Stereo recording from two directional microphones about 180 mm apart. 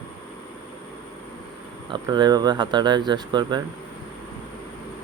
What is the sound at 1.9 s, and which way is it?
Speech, 25° right (ahead or behind).